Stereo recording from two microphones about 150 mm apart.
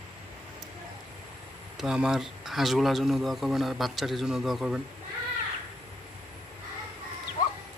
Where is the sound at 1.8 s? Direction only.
5° right (ahead or behind).